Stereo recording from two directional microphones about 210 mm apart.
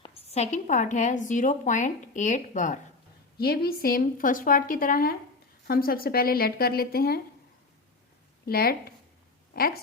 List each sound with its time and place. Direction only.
0.0 s a woman's voice: 30° left (ahead or behind)
3.3 s a woman's voice: 50° left (ahead or behind)
8.4 s a woman's voice: 45° left (ahead or behind)